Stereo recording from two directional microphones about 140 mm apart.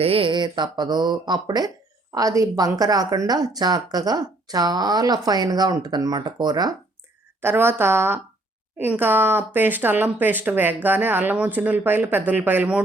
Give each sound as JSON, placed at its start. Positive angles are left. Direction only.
{"t": 0.0, "sound": "a woman's voice", "side_deg": -40}
{"t": 7.4, "sound": "speech", "side_deg": -15}